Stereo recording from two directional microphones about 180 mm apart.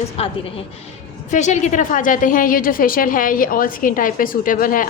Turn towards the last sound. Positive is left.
turn(degrees=50)  # may be behind; listen again after turning